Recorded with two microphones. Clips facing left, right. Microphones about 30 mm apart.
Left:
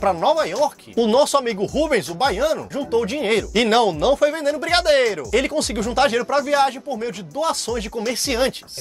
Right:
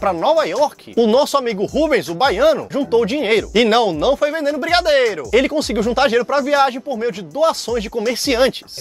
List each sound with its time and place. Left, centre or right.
0.0 s speech: centre
2.4 s speech: right
3.3 s speech: centre
6.9 s speech: centre
8.1 s speech: right